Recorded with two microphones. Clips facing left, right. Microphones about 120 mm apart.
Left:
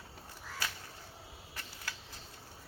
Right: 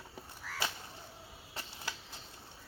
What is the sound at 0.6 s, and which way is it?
Crow, 25° right (ahead or behind).